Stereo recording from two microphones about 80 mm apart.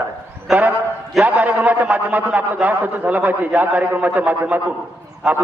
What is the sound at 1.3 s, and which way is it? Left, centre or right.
A man's voice, centre.